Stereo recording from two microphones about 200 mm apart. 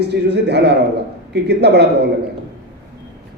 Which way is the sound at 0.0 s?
55° right (ahead or behind).